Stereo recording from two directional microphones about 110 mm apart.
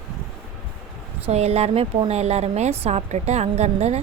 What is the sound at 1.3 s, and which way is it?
A woman's voice, 75° right (ahead or behind).